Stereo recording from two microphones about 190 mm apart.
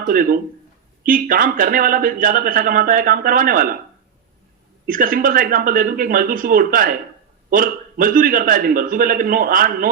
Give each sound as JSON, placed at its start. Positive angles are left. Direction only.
{"t": 0.1, "sound": "speech", "side_deg": -50}
{"t": 4.9, "sound": "speech", "side_deg": -45}